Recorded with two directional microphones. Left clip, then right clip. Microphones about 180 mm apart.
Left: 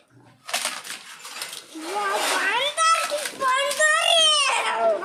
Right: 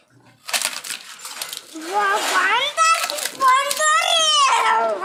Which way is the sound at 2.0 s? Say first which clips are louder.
Right 4 dB; 50° right (ahead or behind).